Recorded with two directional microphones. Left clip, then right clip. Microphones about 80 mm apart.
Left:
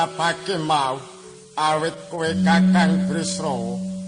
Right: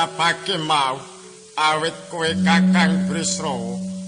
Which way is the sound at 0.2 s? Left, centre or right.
Left.